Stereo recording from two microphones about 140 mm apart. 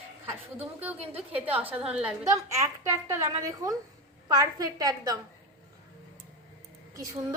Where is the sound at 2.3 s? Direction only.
20° right (ahead or behind).